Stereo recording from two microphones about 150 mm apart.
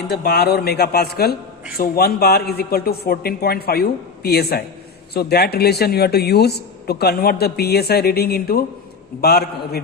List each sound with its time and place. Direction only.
0.1 s speech: 90° left